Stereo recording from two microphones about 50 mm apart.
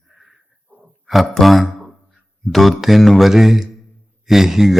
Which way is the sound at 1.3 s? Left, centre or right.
Centre.